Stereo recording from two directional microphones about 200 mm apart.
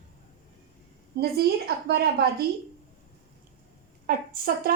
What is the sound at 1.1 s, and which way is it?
A woman's voice, 55° right (ahead or behind).